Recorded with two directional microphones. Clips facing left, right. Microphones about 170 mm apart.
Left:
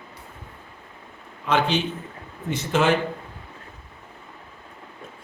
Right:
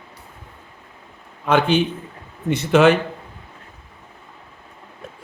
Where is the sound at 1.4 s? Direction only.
55° right (ahead or behind).